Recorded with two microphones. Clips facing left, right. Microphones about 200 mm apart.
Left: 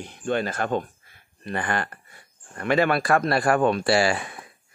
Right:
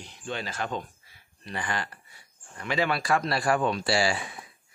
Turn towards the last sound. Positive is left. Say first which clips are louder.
# left 5 dB
turn(degrees=55)  # may be behind; listen again after turning